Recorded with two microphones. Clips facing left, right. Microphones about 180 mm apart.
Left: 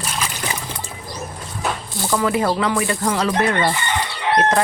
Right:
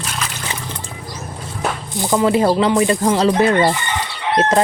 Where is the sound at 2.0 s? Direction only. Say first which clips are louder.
Right 5 dB; 20° right (ahead or behind).